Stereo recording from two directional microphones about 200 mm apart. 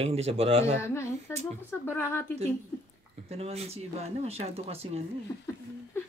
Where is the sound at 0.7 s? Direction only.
10° left (ahead or behind).